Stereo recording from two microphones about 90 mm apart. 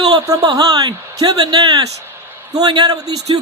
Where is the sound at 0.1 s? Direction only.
45° right (ahead or behind).